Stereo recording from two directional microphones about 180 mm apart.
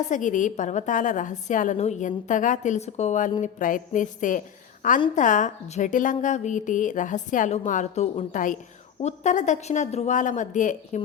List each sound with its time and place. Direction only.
0.0 s a woman's voice: 45° left (ahead or behind)